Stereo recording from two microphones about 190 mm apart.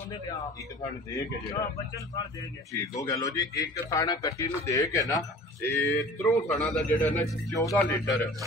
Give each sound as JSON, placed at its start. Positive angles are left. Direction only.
{"t": 2.7, "sound": "a man's voice", "side_deg": 15}
{"t": 6.5, "sound": "a man's voice", "side_deg": 5}